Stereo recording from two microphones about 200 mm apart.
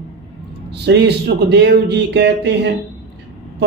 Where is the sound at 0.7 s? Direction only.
60° right (ahead or behind).